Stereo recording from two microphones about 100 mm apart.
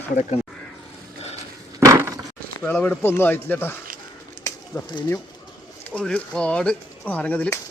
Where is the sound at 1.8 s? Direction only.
30° right (ahead or behind).